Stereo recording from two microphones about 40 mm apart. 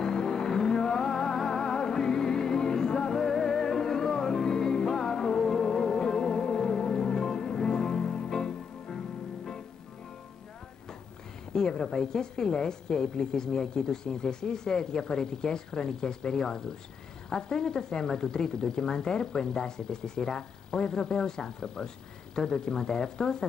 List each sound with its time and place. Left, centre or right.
0.0 s music: centre
11.5 s a woman's voice: centre